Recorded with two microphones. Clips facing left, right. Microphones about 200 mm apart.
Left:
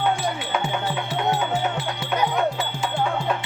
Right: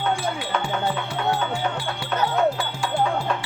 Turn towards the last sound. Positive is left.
turn(degrees=20)  # may be behind; listen again after turning